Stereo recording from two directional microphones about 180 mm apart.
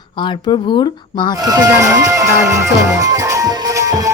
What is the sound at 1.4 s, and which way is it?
Music, 20° right (ahead or behind).